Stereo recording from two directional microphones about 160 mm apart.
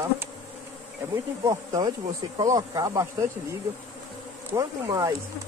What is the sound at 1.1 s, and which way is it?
A man's voice, 20° right (ahead or behind).